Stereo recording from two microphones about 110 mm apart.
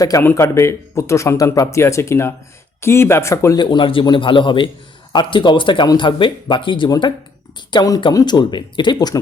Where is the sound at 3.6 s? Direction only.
45° left (ahead or behind).